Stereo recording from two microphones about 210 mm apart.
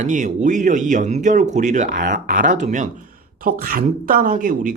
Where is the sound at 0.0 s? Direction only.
35° right (ahead or behind).